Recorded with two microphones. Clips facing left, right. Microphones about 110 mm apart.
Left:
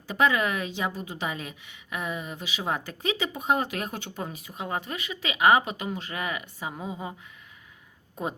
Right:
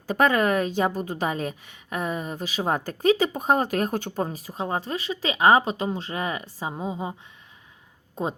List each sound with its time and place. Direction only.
0.1 s a woman's voice: 45° right (ahead or behind); by 8.4 s 25° right (ahead or behind)